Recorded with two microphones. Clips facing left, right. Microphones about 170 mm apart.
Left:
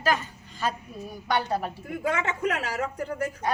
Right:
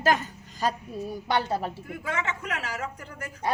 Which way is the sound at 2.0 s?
35° left (ahead or behind).